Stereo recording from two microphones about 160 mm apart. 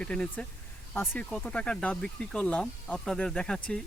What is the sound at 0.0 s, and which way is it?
Speech, 5° left (ahead or behind).